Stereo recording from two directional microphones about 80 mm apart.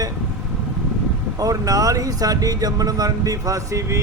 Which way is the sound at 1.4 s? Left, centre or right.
Right.